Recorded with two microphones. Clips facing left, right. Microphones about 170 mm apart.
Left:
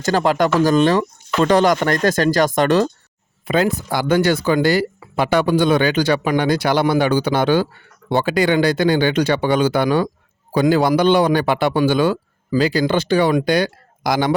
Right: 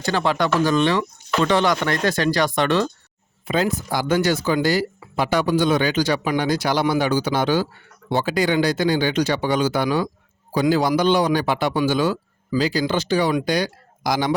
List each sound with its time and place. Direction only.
0.0 s speech: 45° left (ahead or behind)
3.4 s speech: 60° left (ahead or behind)